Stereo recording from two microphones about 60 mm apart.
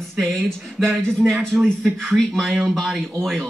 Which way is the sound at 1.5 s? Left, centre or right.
Right.